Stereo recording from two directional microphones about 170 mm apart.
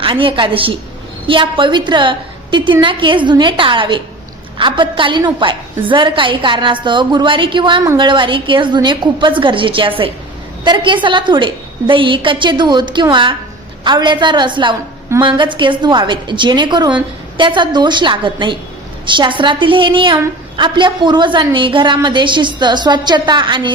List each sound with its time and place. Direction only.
0.0 s a woman's voice: 30° right (ahead or behind)